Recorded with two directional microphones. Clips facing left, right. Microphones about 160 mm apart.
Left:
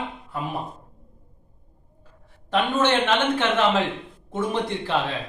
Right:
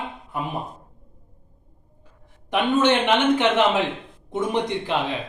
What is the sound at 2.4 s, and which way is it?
A man's voice, 15° right (ahead or behind).